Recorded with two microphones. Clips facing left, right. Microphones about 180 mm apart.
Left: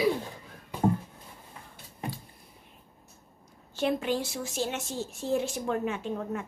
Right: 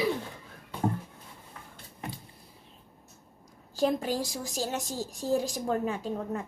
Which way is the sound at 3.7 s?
35° right (ahead or behind).